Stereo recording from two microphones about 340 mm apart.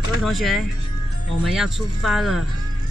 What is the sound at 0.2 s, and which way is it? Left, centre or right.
Speech, centre.